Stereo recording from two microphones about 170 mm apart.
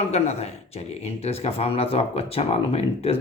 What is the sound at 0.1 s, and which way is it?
Speech, 40° left (ahead or behind).